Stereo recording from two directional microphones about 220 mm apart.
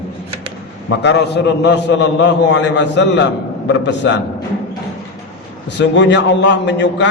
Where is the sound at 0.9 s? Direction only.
55° left (ahead or behind).